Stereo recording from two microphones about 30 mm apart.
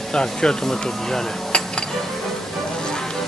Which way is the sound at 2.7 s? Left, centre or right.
Left.